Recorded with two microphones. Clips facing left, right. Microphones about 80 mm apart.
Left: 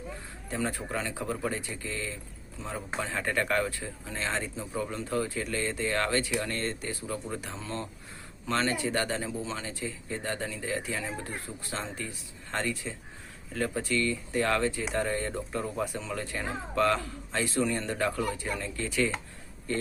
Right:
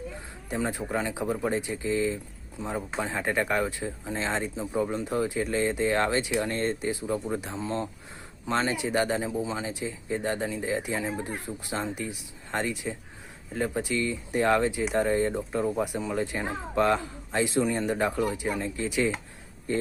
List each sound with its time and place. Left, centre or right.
0.5 s a man's voice: centre